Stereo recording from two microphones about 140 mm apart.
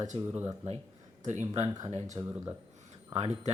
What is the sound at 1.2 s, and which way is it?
Speech, 55° right (ahead or behind).